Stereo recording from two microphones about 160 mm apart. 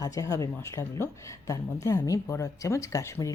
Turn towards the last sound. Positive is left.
turn(degrees=20)  # may be behind; listen again after turning